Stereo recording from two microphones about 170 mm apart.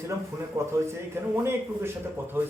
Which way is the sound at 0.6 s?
15° right (ahead or behind).